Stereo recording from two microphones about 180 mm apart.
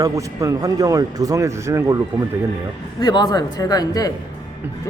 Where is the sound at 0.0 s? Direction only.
15° right (ahead or behind).